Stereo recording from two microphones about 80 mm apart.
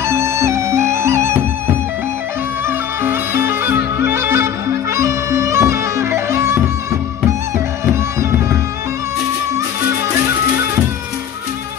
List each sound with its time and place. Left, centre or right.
0.0 s music: right
3.0 s music: right